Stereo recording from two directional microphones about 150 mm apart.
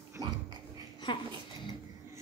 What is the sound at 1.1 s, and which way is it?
Speech, 30° left (ahead or behind).